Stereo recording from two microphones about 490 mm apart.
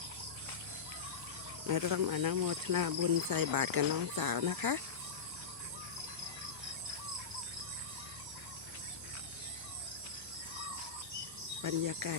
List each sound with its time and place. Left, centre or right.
1.6 s speech: right
11.6 s speech: right